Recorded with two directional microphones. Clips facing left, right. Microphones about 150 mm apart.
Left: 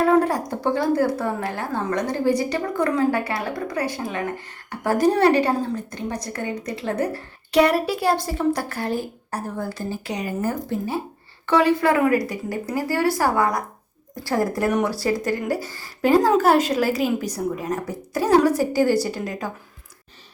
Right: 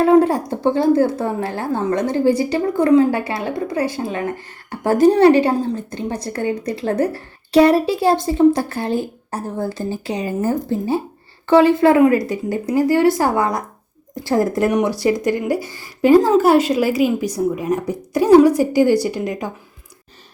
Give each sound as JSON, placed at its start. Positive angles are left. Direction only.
{"t": 0.0, "sound": "a woman's voice", "side_deg": -25}